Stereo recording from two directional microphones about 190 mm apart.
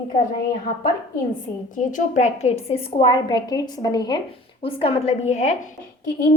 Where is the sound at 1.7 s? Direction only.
40° left (ahead or behind).